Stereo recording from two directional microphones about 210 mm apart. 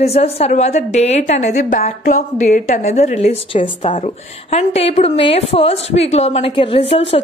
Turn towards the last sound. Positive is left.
turn(degrees=25)  # may be behind; listen again after turning